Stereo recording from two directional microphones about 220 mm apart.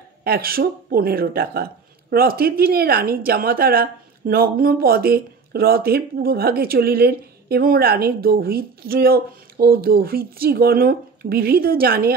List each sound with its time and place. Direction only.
0.2 s speech: 45° right (ahead or behind)